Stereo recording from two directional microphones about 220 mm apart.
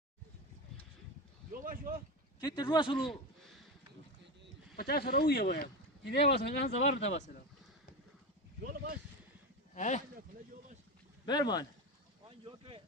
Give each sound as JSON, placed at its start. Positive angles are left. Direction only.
{"t": 1.5, "sound": "speech", "side_deg": -40}
{"t": 2.4, "sound": "speech", "side_deg": 20}
{"t": 4.7, "sound": "speech", "side_deg": 45}
{"t": 6.3, "sound": "speech", "side_deg": 30}
{"t": 9.8, "sound": "speech", "side_deg": 30}
{"t": 11.2, "sound": "speech", "side_deg": 20}
{"t": 12.3, "sound": "speech", "side_deg": -25}